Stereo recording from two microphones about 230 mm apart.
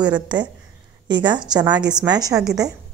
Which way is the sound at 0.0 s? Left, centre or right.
Centre.